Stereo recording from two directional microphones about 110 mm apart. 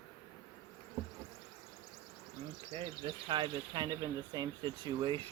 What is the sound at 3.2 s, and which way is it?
Speech, 45° right (ahead or behind).